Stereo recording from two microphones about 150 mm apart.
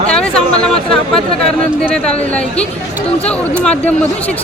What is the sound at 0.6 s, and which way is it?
Speech, 5° left (ahead or behind).